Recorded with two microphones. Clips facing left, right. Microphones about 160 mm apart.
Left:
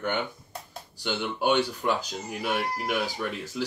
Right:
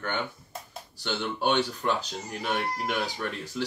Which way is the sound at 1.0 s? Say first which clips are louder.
Left 2 dB; 10° left (ahead or behind).